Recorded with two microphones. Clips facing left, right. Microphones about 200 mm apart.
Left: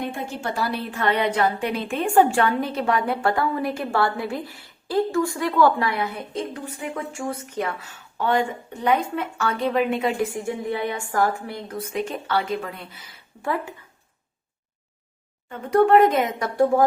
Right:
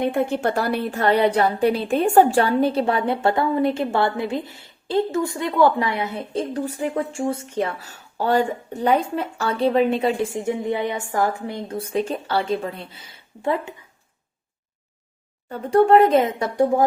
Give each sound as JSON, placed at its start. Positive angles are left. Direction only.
{"t": 0.0, "sound": "a woman's voice", "side_deg": -60}
{"t": 15.4, "sound": "a woman's voice", "side_deg": -35}